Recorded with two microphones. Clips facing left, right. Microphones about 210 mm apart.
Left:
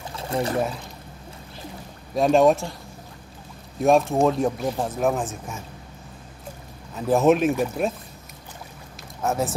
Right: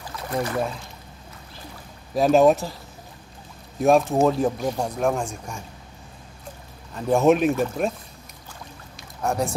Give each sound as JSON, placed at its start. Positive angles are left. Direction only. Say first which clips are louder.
{"t": 0.1, "sound": "a sound", "louder": "left 1 dB", "side_deg": 25}
{"t": 2.1, "sound": "speech", "louder": "right 1 dB", "side_deg": 0}
{"t": 3.8, "sound": "speech", "louder": "even", "side_deg": 0}
{"t": 7.0, "sound": "speech", "louder": "even", "side_deg": 0}
{"t": 9.2, "sound": "speech", "louder": "even", "side_deg": 5}